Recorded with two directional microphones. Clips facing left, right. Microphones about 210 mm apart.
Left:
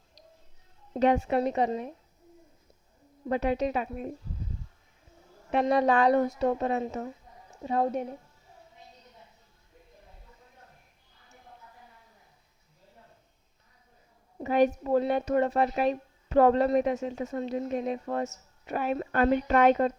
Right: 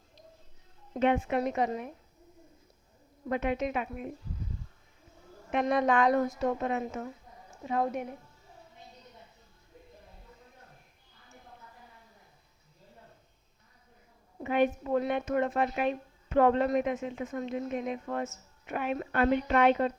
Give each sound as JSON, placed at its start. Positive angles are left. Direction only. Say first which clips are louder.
{"t": 0.9, "sound": "a woman's voice", "louder": "left 3 dB", "side_deg": 40}
{"t": 3.2, "sound": "a woman's voice", "louder": "left 3 dB", "side_deg": 35}
{"t": 5.5, "sound": "a woman's voice", "louder": "left 3 dB", "side_deg": 35}
{"t": 14.4, "sound": "a woman's voice", "louder": "left 3 dB", "side_deg": 40}